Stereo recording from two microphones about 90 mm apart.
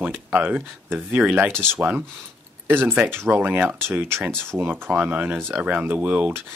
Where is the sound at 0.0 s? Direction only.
20° right (ahead or behind).